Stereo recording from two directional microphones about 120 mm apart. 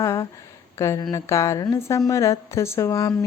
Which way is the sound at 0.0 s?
25° left (ahead or behind).